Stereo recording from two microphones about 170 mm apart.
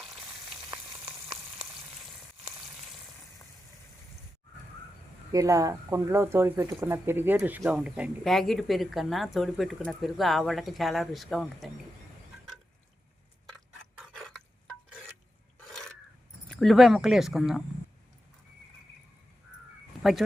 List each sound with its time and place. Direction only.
5.3 s speech: 20° right (ahead or behind); by 11.7 s centre (ahead or behind)
14.0 s dishes: centre (ahead or behind)
16.5 s speech: centre (ahead or behind)
20.0 s speech: centre (ahead or behind)